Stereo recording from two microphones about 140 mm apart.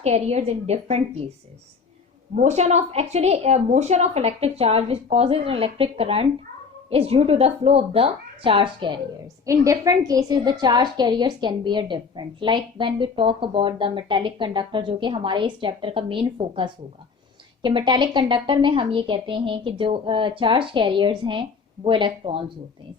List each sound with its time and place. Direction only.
0.0 s a woman's voice: 50° right (ahead or behind)
2.3 s a woman's voice: 55° right (ahead or behind); by 9.0 s 35° right (ahead or behind)
9.2 s a woman's voice: 25° right (ahead or behind); by 22.4 s 40° right (ahead or behind)